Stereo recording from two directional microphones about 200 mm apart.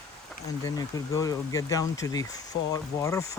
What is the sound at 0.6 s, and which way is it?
Speech, 15° left (ahead or behind).